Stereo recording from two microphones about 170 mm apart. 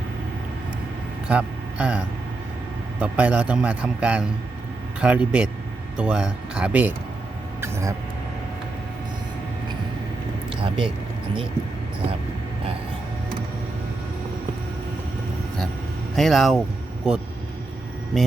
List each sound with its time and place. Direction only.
1.3 s a man's voice: 5° right (ahead or behind)
10.6 s speech: 30° right (ahead or behind)
16.1 s speech: centre (ahead or behind)